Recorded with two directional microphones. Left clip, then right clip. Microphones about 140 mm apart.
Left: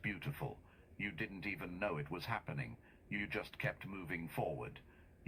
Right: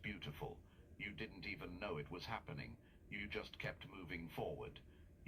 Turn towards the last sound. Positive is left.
turn(degrees=50)  # may be behind; listen again after turning